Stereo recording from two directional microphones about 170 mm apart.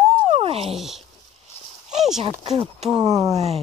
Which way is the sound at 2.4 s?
35° right (ahead or behind).